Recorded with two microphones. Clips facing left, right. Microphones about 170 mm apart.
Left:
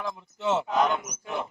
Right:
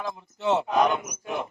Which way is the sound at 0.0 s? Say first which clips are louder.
Right 1 dB; 20° right (ahead or behind).